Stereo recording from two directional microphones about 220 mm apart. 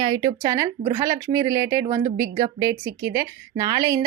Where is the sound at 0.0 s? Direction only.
20° right (ahead or behind).